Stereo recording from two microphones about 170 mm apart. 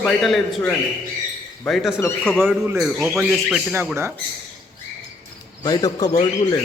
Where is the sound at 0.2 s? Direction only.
Centre (ahead or behind).